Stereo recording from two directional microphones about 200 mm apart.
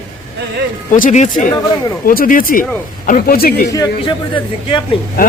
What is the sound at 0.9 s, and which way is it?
Speech, 40° left (ahead or behind).